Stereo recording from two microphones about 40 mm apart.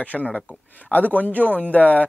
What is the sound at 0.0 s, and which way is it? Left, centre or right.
A man's voice, left.